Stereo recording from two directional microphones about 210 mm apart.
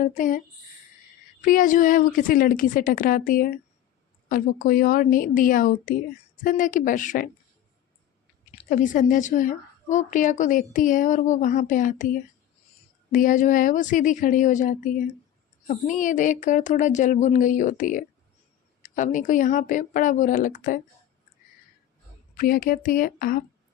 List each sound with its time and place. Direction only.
0.0 s a woman's voice: 40° left (ahead or behind)
8.5 s a woman's voice: 40° left (ahead or behind)
22.4 s speech: 45° left (ahead or behind)